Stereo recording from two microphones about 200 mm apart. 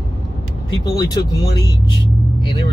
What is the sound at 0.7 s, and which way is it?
Speech, 20° left (ahead or behind).